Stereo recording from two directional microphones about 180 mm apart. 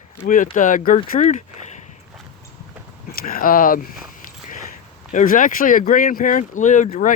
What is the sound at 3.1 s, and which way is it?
Speech, 55° left (ahead or behind).